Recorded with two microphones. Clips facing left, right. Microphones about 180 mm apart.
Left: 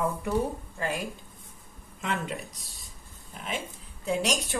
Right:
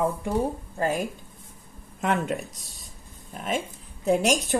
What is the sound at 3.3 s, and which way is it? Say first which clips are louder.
Speech: right 6 dB; 45° right (ahead or behind).